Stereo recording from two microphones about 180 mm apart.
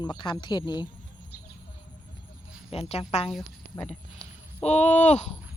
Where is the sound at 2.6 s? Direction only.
35° left (ahead or behind).